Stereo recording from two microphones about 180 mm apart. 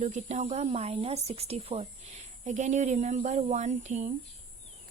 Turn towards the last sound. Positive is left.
turn(degrees=-40)  # may be behind; listen again after turning